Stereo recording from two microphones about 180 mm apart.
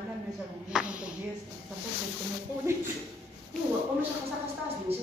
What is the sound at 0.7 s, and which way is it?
Speech, 5° right (ahead or behind).